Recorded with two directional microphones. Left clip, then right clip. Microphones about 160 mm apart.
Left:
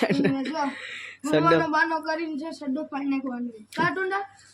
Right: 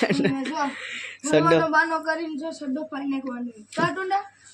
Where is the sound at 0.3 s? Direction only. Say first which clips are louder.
Right 1 dB; 10° right (ahead or behind).